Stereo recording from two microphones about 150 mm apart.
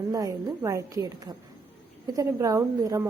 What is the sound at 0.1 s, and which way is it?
Speech, 25° right (ahead or behind).